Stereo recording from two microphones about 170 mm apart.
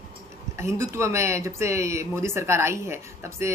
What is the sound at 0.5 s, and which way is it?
Speech, 15° right (ahead or behind).